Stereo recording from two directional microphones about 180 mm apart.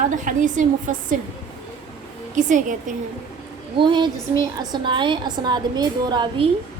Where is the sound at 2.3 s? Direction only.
45° right (ahead or behind).